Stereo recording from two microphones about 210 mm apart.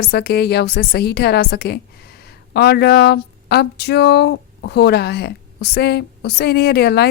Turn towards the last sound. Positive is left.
turn(degrees=50)  # may be behind; listen again after turning